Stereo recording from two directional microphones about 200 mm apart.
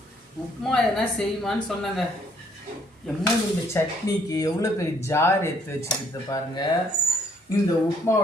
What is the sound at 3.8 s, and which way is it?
Speech, 10° left (ahead or behind).